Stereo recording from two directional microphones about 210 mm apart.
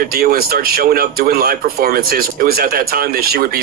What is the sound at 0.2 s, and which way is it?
Speech, 45° right (ahead or behind).